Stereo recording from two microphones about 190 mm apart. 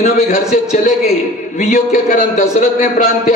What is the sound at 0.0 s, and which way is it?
A man's voice, 45° left (ahead or behind).